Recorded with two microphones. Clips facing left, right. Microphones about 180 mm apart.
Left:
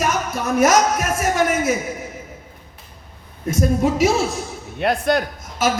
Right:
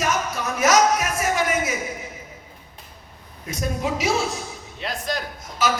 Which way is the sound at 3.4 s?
45° left (ahead or behind).